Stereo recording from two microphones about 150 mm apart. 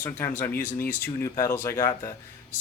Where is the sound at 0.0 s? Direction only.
15° left (ahead or behind).